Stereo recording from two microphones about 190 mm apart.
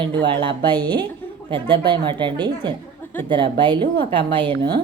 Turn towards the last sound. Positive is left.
turn(degrees=-25)  # may be behind; listen again after turning